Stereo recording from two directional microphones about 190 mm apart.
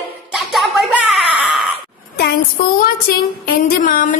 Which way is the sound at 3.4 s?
50° left (ahead or behind).